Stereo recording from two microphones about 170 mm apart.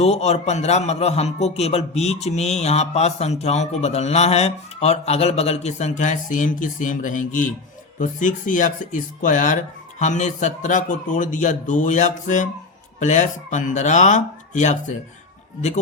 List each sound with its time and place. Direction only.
0.0 s a man's voice: 40° left (ahead or behind)